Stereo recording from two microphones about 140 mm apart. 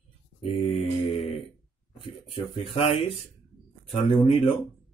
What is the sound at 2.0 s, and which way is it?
Speech, 40° left (ahead or behind).